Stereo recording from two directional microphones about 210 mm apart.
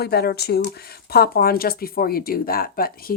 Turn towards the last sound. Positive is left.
turn(degrees=45)  # may be behind; listen again after turning